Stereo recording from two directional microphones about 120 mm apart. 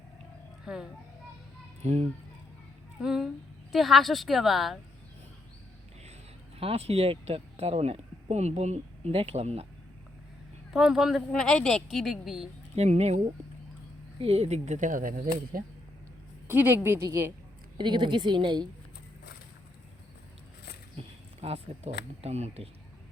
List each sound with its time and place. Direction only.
0.6 s speech: 5° right (ahead or behind)
1.8 s speech: 65° right (ahead or behind)
3.0 s speech: 5° right (ahead or behind)
6.6 s speech: 55° right (ahead or behind)
10.7 s speech: 5° right (ahead or behind)
12.7 s speech: 65° right (ahead or behind); by 15.2 s 90° right
16.5 s a woman's voice: 20° right (ahead or behind)
17.7 s a woman's voice: 40° right (ahead or behind)
21.4 s speech: 55° right (ahead or behind)